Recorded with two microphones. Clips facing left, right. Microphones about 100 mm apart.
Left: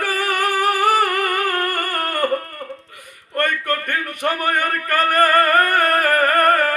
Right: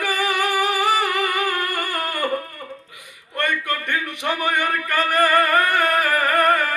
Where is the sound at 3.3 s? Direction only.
45° left (ahead or behind).